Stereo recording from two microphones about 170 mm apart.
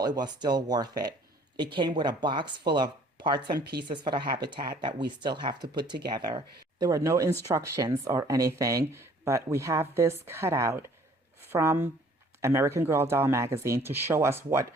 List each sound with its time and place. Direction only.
0.0 s speech: 25° right (ahead or behind)
3.5 s speech: 75° right (ahead or behind)
3.8 s speech: 25° right (ahead or behind)